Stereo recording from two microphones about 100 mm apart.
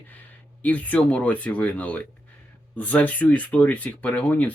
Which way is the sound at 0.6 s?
15° left (ahead or behind).